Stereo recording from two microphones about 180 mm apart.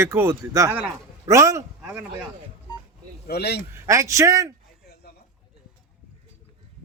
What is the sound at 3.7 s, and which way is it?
Speech, 15° right (ahead or behind).